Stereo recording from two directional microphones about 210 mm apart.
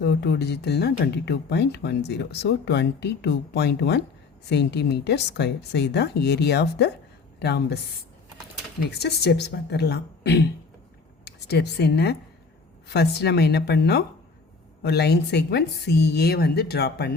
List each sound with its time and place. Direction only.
0.0 s speech: 50° left (ahead or behind)
8.9 s speech: 50° left (ahead or behind)